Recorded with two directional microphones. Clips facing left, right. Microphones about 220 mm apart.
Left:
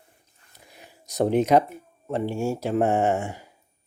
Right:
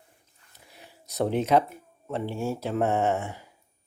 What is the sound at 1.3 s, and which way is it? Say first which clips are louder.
Speech: left 4 dB; 15° left (ahead or behind).